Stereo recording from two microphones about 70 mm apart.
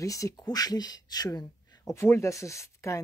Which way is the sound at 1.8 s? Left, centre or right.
Left.